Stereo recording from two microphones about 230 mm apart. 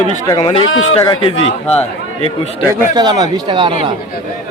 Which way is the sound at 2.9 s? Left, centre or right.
Centre.